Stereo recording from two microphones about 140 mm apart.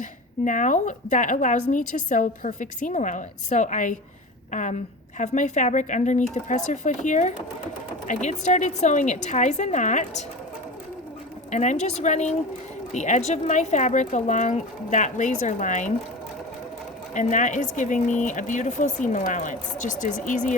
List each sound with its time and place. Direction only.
0.0 s a woman's voice: 65° left (ahead or behind)
11.5 s a woman's voice: 55° left (ahead or behind)
17.2 s a woman's voice: 60° left (ahead or behind)